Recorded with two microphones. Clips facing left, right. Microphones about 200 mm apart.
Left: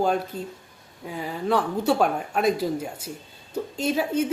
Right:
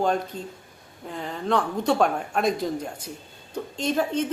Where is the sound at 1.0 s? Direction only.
5° left (ahead or behind).